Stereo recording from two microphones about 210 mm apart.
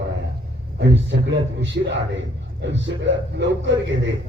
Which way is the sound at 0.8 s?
60° right (ahead or behind).